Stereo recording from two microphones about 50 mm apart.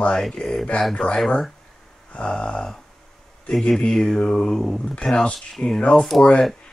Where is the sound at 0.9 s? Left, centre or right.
Centre.